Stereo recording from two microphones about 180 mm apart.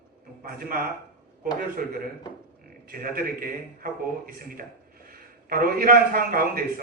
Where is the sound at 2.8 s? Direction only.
55° right (ahead or behind).